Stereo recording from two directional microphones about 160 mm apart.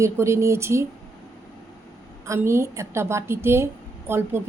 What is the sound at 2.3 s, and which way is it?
A woman's voice, 15° right (ahead or behind).